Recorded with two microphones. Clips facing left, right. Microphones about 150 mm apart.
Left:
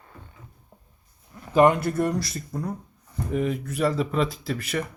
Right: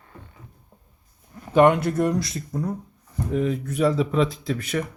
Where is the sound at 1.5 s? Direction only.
Centre (ahead or behind).